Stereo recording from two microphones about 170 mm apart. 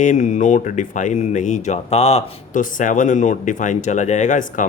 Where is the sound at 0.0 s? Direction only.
45° left (ahead or behind).